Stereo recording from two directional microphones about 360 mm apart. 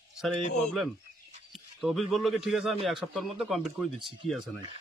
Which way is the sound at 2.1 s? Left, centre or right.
Centre.